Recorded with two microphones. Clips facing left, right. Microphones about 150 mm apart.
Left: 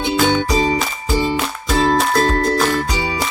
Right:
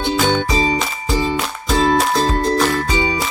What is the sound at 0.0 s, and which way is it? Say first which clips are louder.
Music: left 1 dB; 5° left (ahead or behind).